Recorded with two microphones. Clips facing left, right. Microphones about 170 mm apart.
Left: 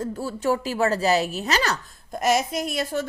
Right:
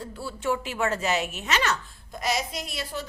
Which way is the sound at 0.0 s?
40° left (ahead or behind).